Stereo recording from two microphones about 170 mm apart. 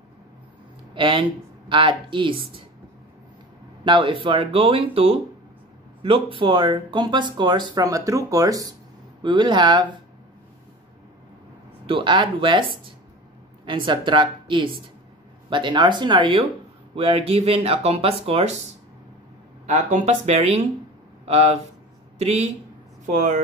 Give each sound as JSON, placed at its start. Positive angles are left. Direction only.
{"t": 0.9, "sound": "speech", "side_deg": -30}
{"t": 3.8, "sound": "speech", "side_deg": -30}
{"t": 11.8, "sound": "speech", "side_deg": -30}
{"t": 13.7, "sound": "speech", "side_deg": -30}
{"t": 19.6, "sound": "speech", "side_deg": -45}